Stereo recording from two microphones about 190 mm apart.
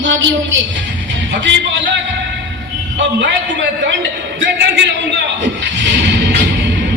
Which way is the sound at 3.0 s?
70° right (ahead or behind).